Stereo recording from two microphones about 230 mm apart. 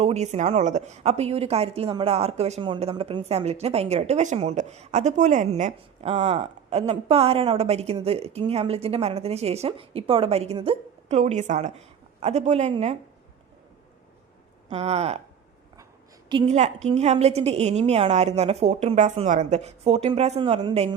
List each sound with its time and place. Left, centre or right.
0.0 s a woman's voice: right
14.7 s a woman's voice: right
16.3 s a woman's voice: right